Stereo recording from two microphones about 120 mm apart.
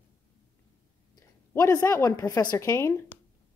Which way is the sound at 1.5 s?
25° left (ahead or behind).